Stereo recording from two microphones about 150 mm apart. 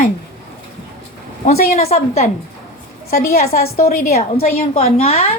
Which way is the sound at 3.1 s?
80° left.